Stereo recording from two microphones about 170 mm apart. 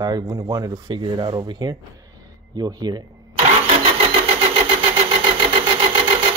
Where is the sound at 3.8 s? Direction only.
35° right (ahead or behind).